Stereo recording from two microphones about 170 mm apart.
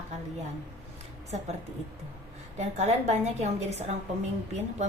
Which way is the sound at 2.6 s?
40° right (ahead or behind).